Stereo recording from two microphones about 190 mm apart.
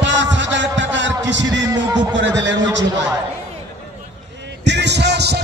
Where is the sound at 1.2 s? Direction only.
70° right (ahead or behind).